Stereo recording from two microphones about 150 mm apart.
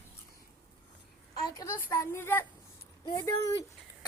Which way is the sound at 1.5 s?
15° left (ahead or behind).